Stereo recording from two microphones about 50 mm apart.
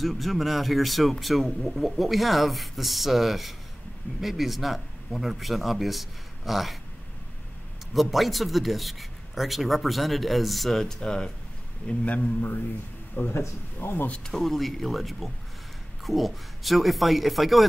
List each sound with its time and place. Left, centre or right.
0.0 s a man's voice: centre
7.9 s a man's voice: centre
11.0 s a man's voice: centre
13.2 s speech: left
14.2 s a man's voice: centre